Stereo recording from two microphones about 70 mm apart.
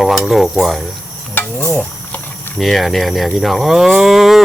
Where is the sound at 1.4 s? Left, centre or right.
Left.